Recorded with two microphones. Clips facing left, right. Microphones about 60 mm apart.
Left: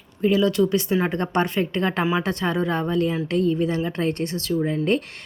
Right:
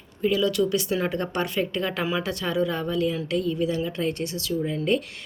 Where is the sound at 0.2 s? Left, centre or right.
Left.